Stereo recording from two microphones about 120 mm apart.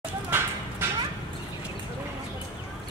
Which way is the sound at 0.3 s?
15° right (ahead or behind).